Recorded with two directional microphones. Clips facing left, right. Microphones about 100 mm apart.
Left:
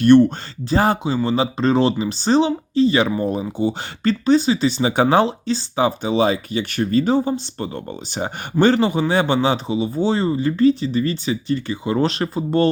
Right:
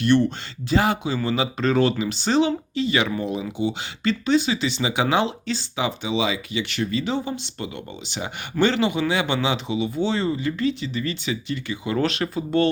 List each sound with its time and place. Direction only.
0.0 s speech: 45° left (ahead or behind)